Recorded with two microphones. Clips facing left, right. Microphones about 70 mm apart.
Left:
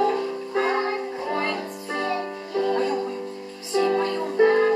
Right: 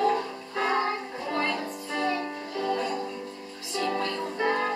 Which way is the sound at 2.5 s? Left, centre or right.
Left.